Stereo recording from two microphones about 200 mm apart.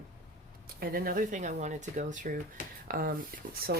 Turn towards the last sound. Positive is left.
turn(degrees=-45)  # may be behind; listen again after turning